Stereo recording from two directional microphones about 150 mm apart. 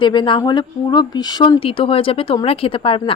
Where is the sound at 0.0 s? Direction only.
30° left (ahead or behind).